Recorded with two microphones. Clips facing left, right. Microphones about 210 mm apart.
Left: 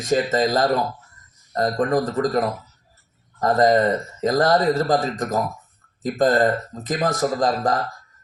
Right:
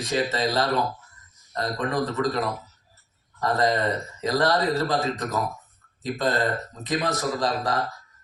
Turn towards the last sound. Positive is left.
turn(degrees=45)  # may be behind; listen again after turning